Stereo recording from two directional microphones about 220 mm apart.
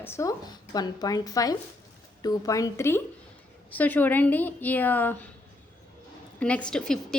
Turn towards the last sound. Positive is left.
turn(degrees=5)  # may be behind; listen again after turning